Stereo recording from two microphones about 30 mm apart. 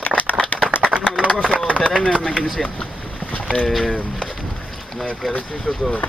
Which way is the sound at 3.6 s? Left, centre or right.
Centre.